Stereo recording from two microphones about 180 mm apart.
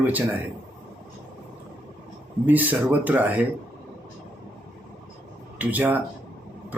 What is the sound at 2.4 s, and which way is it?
Speech, 10° right (ahead or behind).